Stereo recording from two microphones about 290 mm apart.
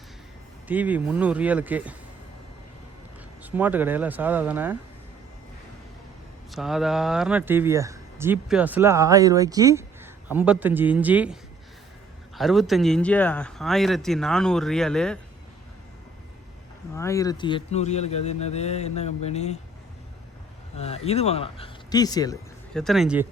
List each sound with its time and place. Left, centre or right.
0.7 s speech: centre
3.4 s speech: centre
6.5 s speech: centre
12.4 s speech: centre
16.9 s speech: centre
20.7 s speech: left
22.7 s speech: centre